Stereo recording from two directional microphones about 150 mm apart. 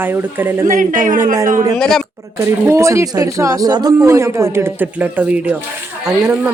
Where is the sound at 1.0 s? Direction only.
60° right (ahead or behind).